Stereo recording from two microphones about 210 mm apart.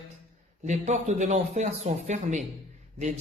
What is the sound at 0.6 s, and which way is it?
A man's voice, 35° right (ahead or behind).